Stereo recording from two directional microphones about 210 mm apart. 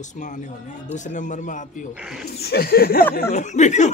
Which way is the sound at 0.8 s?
35° left (ahead or behind).